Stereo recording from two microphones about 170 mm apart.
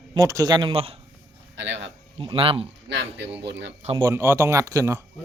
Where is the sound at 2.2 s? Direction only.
30° right (ahead or behind).